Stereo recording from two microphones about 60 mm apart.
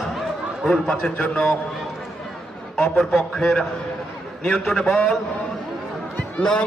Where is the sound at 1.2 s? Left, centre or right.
Left.